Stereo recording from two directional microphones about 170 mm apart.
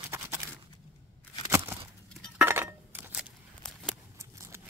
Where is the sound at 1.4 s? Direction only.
15° right (ahead or behind).